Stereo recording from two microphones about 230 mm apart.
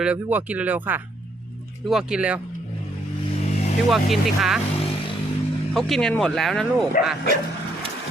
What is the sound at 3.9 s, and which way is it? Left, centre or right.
Speech, centre.